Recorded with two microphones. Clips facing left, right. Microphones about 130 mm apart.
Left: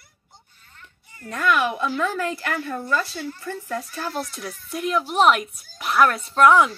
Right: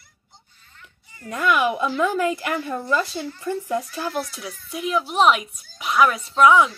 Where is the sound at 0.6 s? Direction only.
45° left (ahead or behind).